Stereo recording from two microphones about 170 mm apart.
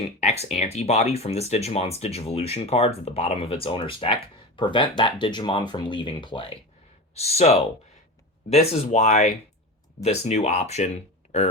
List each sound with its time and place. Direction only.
0.2 s speech: 40° left (ahead or behind)